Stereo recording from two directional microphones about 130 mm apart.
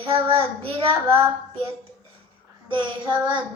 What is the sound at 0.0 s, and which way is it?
Female singing, 45° right (ahead or behind).